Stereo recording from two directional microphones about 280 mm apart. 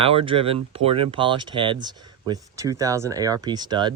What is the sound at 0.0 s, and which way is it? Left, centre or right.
Speech, centre.